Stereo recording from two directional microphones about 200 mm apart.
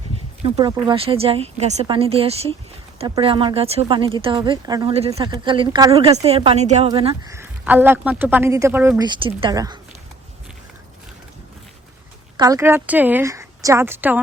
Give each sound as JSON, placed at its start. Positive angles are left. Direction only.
{"t": 0.4, "sound": "speech", "side_deg": -25}
{"t": 4.9, "sound": "speech", "side_deg": -30}
{"t": 7.3, "sound": "a man's voice", "side_deg": -10}
{"t": 9.0, "sound": "speech", "side_deg": -25}
{"t": 12.4, "sound": "a man's voice", "side_deg": -15}